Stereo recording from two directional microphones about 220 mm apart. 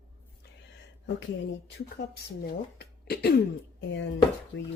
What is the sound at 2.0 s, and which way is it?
Speech, 50° left (ahead or behind).